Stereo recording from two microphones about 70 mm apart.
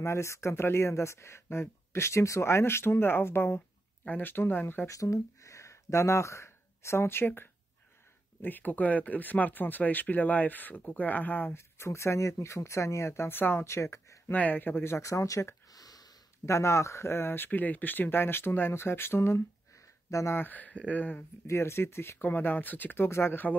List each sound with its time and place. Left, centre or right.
0.0 s speech: left
4.0 s speech: left
4.8 s speech: left
13.7 s speech: left
14.3 s speech: left
15.7 s a sound: left
16.4 s speech: left
20.1 s speech: left
20.3 s speech: left
21.5 s speech: left